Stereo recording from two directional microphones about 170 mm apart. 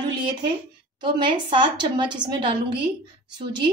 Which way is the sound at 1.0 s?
25° right (ahead or behind).